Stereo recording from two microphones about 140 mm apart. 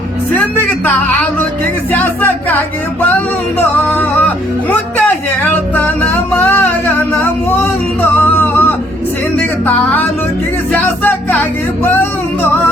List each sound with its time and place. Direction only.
0.3 s a sound: 10° left (ahead or behind)
1.9 s music: 15° left (ahead or behind)
3.8 s music: 10° left (ahead or behind)